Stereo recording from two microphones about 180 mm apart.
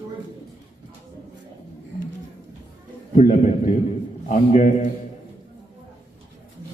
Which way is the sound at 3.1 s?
40° left (ahead or behind).